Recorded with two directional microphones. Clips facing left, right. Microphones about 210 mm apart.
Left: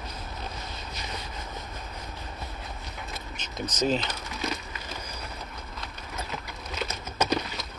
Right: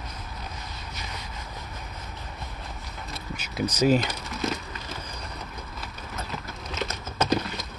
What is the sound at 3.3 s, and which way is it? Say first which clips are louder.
Speech: right 7 dB; 10° right (ahead or behind).